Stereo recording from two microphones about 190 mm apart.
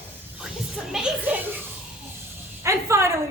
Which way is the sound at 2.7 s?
15° right (ahead or behind).